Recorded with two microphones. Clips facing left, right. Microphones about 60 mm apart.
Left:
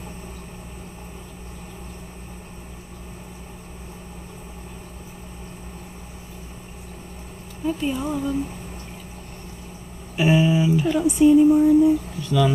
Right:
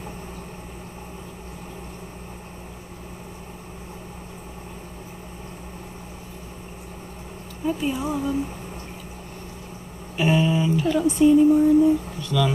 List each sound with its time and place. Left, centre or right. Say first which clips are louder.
7.6 s speech: even; centre
10.1 s a sound: left 2 dB; centre
12.2 s speech: left 2 dB; centre